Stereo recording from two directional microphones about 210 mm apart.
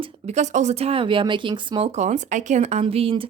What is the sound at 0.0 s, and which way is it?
Speech, 30° right (ahead or behind).